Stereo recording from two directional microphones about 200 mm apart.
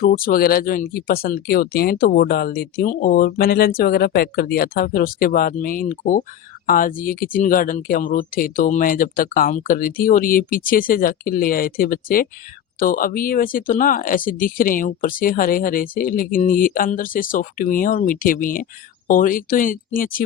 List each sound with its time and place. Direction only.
0.0 s speech: 45° left (ahead or behind)